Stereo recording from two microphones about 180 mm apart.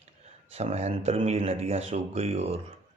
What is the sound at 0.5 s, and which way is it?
Speech, 35° right (ahead or behind).